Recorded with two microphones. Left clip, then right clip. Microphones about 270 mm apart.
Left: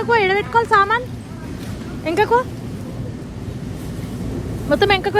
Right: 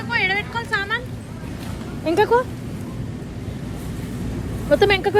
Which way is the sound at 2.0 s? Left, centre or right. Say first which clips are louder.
Left 1 dB; centre.